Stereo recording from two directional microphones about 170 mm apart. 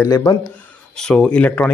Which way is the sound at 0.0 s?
20° left (ahead or behind).